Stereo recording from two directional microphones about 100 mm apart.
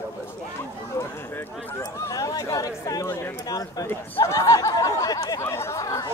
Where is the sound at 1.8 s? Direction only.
35° left (ahead or behind).